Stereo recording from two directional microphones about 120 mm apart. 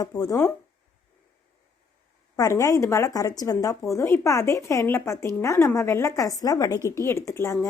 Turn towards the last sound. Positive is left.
turn(degrees=25)  # may be behind; listen again after turning